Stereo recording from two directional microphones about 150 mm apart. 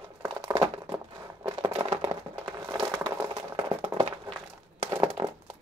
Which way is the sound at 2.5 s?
25° right (ahead or behind).